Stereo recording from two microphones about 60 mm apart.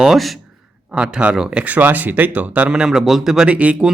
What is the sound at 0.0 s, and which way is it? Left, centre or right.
A man's voice, centre.